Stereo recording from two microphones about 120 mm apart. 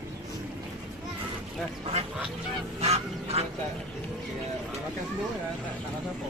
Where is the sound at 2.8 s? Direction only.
60° right (ahead or behind).